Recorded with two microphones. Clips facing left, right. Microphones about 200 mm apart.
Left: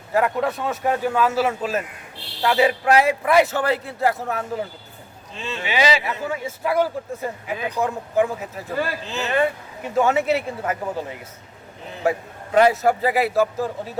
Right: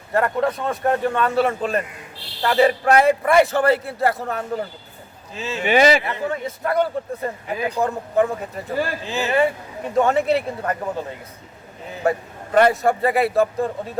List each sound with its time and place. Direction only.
0.1 s a man's voice: 5° left (ahead or behind)
5.6 s speech: 50° right (ahead or behind)
6.1 s a man's voice: 5° left (ahead or behind)
9.0 s speech: 10° right (ahead or behind)
9.8 s a man's voice: 5° left (ahead or behind)
12.0 s a man's voice: 5° left (ahead or behind)